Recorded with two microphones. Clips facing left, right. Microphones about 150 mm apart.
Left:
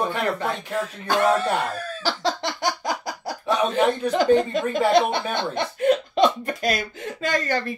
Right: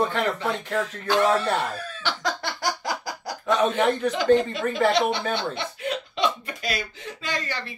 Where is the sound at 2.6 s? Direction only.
25° left (ahead or behind).